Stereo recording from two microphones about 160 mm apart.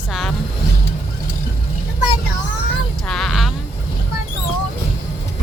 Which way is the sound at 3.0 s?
Centre (ahead or behind).